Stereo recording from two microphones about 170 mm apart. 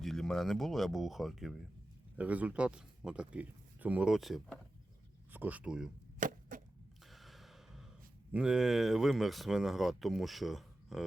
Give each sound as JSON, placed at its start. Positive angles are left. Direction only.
{"t": 0.0, "sound": "speech", "side_deg": 0}
{"t": 6.1, "sound": "chop", "side_deg": -50}
{"t": 7.1, "sound": "sigh", "side_deg": 0}
{"t": 8.3, "sound": "speech", "side_deg": -5}